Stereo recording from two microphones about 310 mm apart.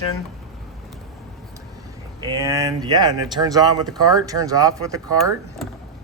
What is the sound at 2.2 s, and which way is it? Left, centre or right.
Speech, centre.